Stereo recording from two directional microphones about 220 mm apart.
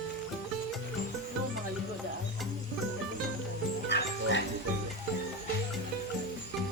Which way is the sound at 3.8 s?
50° left (ahead or behind).